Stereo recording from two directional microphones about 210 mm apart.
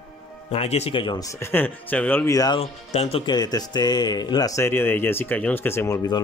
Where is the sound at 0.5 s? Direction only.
30° left (ahead or behind).